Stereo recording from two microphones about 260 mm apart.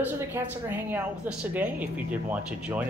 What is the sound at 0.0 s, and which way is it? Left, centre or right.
Speech, centre.